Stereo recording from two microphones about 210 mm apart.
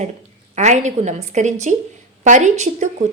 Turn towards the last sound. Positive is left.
turn(degrees=-35)  # may be behind; listen again after turning